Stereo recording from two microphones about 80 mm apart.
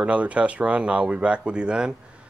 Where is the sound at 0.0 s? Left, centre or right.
Centre.